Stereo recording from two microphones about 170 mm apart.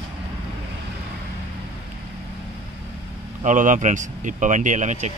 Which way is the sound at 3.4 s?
50° right (ahead or behind).